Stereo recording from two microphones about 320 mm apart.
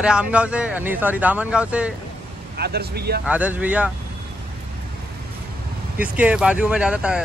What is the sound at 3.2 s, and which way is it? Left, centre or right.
Speech, centre.